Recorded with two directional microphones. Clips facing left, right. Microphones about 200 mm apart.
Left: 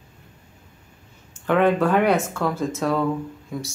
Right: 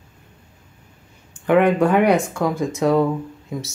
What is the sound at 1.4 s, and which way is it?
Speech, 15° right (ahead or behind).